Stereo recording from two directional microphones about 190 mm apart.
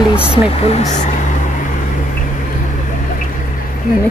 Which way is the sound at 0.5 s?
35° left (ahead or behind).